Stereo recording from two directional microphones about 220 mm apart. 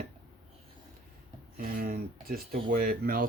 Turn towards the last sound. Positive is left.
turn(degrees=-40)  # may be behind; listen again after turning